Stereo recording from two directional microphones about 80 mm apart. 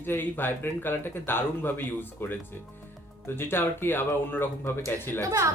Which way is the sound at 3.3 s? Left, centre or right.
Left.